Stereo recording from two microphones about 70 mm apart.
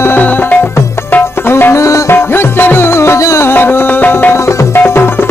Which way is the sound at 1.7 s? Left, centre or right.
Left.